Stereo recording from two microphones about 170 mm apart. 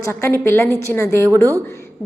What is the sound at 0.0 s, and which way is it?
A woman's voice, 15° left (ahead or behind).